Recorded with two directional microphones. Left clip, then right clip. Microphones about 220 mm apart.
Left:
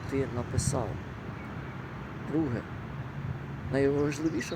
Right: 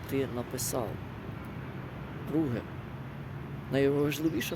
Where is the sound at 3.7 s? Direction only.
5° right (ahead or behind).